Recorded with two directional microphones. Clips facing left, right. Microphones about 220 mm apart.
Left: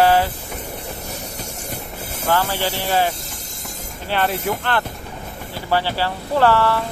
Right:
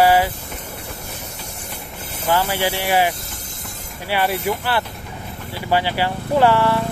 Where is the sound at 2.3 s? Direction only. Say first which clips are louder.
Right 1 dB; 10° right (ahead or behind).